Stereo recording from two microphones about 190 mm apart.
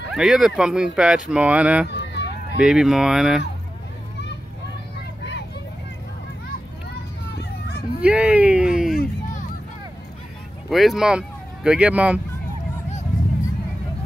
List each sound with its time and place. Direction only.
0.1 s speech: 5° right (ahead or behind)
1.9 s a sound: 65° left (ahead or behind)
2.6 s speech: 5° right (ahead or behind)
6.9 s children playing: 60° left (ahead or behind)
8.0 s a sound: 5° right (ahead or behind)
10.7 s speech: centre (ahead or behind)